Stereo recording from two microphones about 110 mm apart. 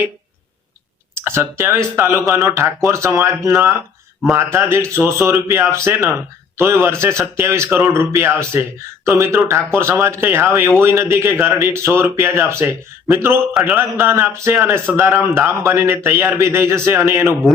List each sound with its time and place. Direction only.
1.1 s a man's voice: 25° right (ahead or behind)
13.5 s a man's voice: 5° right (ahead or behind)
13.7 s a man's voice: 25° right (ahead or behind)